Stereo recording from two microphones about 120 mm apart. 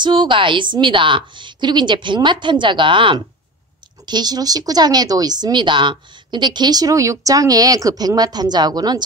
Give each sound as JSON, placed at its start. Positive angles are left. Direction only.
{"t": 0.0, "sound": "speech", "side_deg": -40}